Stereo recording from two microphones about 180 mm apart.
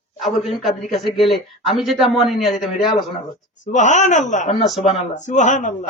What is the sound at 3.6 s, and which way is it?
Speech, 45° left (ahead or behind).